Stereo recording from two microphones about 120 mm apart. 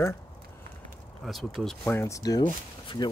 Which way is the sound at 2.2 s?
35° left (ahead or behind).